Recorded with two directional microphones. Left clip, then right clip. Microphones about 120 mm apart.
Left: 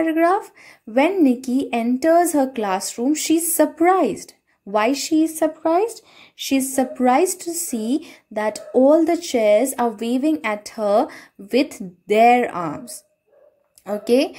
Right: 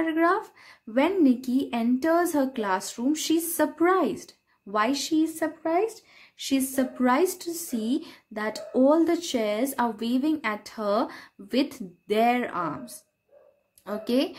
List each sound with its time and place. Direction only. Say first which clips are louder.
0.0 s speech: left 6 dB; 25° left (ahead or behind)
5.4 s speech: left 7 dB; 40° left (ahead or behind)
6.3 s speech: left 6 dB; 25° left (ahead or behind)